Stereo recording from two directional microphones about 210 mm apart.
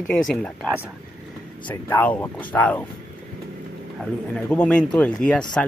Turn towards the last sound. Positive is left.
turn(degrees=5)  # may be behind; listen again after turning